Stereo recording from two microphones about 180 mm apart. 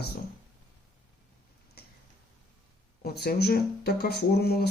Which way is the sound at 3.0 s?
60° left (ahead or behind).